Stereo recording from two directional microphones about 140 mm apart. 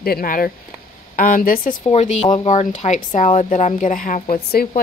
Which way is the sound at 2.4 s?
55° left (ahead or behind).